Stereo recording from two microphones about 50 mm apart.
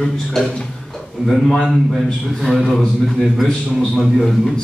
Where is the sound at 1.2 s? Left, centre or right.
Centre.